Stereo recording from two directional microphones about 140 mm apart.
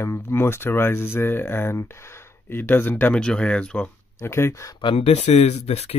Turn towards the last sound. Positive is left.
turn(degrees=50)  # may be behind; listen again after turning